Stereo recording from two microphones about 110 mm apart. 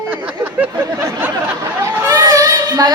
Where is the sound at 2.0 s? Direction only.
25° right (ahead or behind).